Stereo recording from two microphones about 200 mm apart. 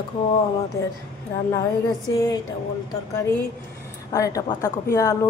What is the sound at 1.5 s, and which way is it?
Music, 15° left (ahead or behind).